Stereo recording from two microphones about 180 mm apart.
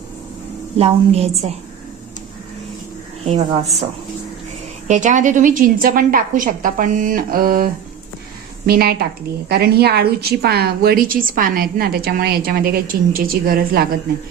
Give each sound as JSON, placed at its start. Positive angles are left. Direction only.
{"t": 0.8, "sound": "a woman's voice", "side_deg": -35}
{"t": 3.2, "sound": "a woman's voice", "side_deg": -35}
{"t": 4.9, "sound": "a woman's voice", "side_deg": -45}